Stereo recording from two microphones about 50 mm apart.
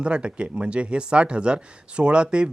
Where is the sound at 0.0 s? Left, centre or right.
Right.